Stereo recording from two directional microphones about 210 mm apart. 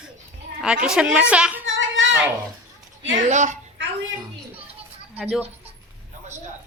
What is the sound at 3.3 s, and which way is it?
Speech, 35° right (ahead or behind).